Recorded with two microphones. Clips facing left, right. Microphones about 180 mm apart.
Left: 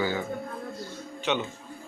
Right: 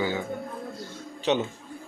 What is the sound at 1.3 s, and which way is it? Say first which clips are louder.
Speech: right 4 dB; 35° right (ahead or behind).